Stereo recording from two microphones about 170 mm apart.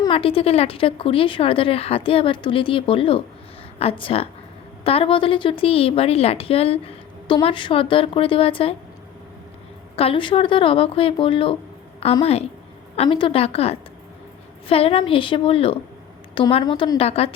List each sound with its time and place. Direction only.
0.0 s speech: 30° left (ahead or behind)
9.9 s a woman's voice: 35° left (ahead or behind)